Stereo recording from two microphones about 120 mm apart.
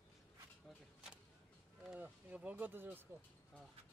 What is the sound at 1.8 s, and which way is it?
Speech, 10° right (ahead or behind).